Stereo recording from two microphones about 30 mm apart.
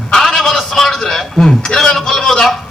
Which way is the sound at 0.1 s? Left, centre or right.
Centre.